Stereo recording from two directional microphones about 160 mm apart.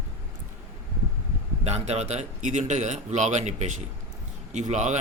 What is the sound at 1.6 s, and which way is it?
Speech, 40° right (ahead or behind).